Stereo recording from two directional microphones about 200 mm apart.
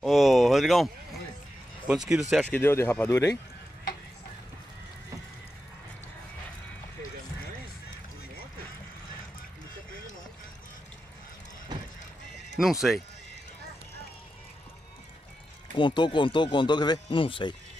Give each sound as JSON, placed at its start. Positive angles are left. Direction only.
{"t": 0.0, "sound": "a sound", "side_deg": 0}
{"t": 1.9, "sound": "speech", "side_deg": -5}
{"t": 2.3, "sound": "speech", "side_deg": 10}
{"t": 12.5, "sound": "speech", "side_deg": 0}
{"t": 15.7, "sound": "speech", "side_deg": 25}